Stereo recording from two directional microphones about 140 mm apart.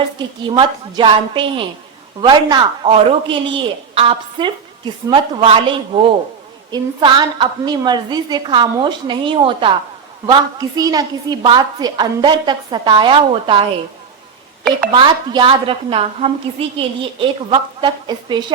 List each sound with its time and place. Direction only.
0.2 s a woman's voice: 35° right (ahead or behind)
6.7 s a woman's voice: 30° right (ahead or behind)
14.9 s a woman's voice: 35° right (ahead or behind)